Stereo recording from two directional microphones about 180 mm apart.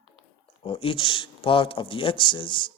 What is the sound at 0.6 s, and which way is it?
Speech, 30° left (ahead or behind).